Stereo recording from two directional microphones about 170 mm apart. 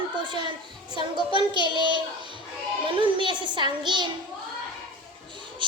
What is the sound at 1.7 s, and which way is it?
Speech, 30° right (ahead or behind).